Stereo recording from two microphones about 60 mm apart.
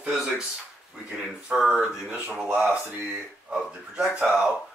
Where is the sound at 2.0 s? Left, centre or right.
Right.